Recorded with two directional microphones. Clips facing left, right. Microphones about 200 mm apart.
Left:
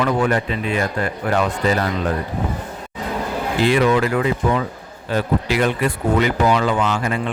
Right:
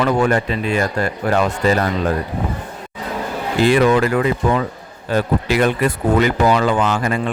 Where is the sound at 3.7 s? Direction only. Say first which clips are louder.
Right 3 dB; 50° right (ahead or behind).